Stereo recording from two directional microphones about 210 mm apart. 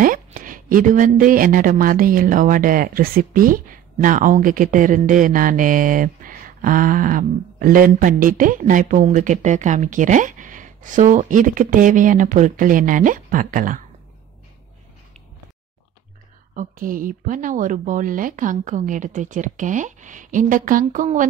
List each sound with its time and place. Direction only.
0.0 s a woman's voice: 40° right (ahead or behind)
16.5 s a woman's voice: 40° right (ahead or behind)